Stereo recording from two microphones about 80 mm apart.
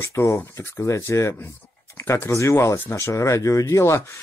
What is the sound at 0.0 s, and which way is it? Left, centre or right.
Speech, left.